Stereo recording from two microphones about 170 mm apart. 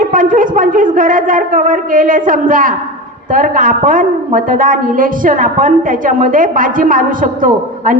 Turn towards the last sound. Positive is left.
turn(degrees=-50)  # may be behind; listen again after turning